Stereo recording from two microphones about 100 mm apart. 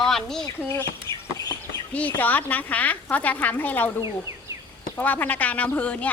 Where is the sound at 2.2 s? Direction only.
20° left (ahead or behind).